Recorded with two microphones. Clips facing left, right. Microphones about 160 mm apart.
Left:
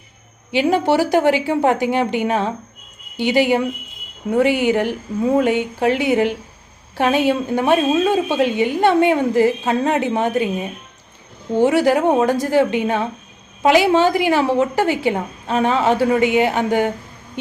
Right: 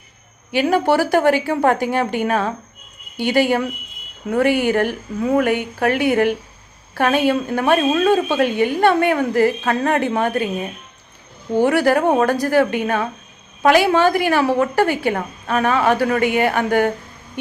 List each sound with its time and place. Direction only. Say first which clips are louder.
0.5 s a woman's voice: even; 20° left (ahead or behind)